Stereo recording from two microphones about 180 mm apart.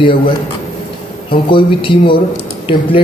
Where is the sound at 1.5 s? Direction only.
30° left (ahead or behind).